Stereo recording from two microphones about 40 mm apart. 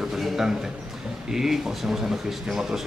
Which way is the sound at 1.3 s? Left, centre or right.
Centre.